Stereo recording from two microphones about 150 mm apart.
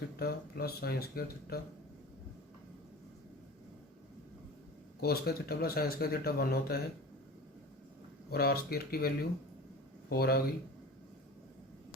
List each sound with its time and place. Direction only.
0.2 s speech: 90° left
4.9 s speech: 90° left
8.3 s speech: 90° left